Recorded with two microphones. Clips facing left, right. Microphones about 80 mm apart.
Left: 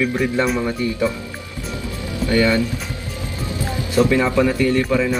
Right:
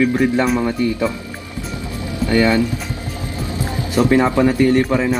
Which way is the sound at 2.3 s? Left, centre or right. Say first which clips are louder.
Right 2 dB; right.